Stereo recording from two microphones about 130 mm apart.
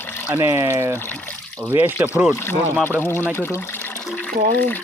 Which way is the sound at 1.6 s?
15° right (ahead or behind).